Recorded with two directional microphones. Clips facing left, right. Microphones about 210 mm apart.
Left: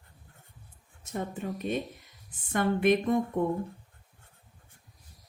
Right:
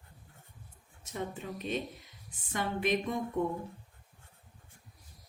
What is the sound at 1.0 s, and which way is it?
Speech, 50° left (ahead or behind).